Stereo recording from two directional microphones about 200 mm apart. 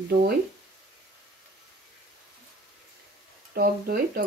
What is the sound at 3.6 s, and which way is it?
Speech, 50° right (ahead or behind).